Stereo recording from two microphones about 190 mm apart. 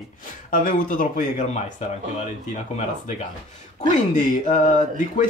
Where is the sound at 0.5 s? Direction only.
45° left (ahead or behind).